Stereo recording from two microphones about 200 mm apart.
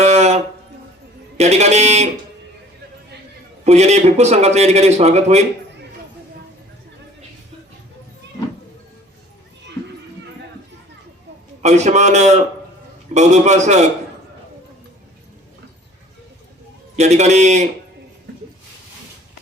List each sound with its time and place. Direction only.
0.0 s a sound: 35° right (ahead or behind)
1.4 s a man's voice: 35° right (ahead or behind)
3.6 s a man's voice: 35° right (ahead or behind)
11.6 s a man's voice: 35° right (ahead or behind)
17.0 s a man's voice: 35° right (ahead or behind)